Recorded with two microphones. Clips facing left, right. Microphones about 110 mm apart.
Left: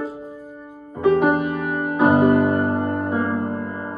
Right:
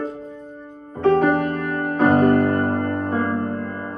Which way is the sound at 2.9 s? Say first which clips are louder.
Even; 45° right (ahead or behind).